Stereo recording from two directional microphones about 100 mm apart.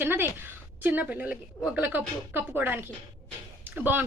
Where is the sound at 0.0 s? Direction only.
20° right (ahead or behind).